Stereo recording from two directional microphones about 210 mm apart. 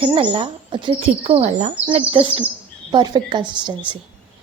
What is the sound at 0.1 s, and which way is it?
Speech, 25° right (ahead or behind).